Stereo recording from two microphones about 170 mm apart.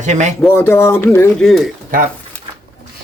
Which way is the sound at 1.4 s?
Centre (ahead or behind).